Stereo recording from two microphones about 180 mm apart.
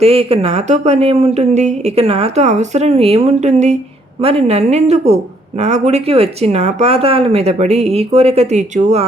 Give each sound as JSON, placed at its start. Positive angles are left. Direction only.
{"t": 0.0, "sound": "a woman's voice", "side_deg": -35}